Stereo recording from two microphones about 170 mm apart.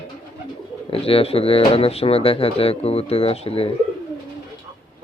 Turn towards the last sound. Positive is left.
turn(degrees=35)  # may be behind; listen again after turning